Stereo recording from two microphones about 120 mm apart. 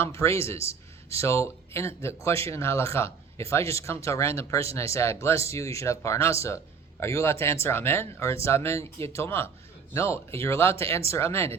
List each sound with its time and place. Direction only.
0.0 s speech: 25° left (ahead or behind)